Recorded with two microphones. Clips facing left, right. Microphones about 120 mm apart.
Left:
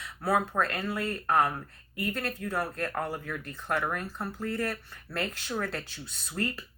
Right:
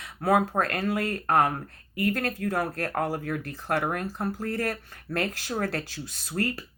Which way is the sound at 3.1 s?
40° right (ahead or behind).